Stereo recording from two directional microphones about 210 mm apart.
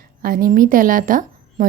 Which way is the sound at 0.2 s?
45° right (ahead or behind).